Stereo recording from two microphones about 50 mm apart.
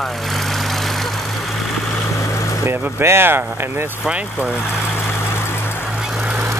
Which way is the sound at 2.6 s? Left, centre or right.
Right.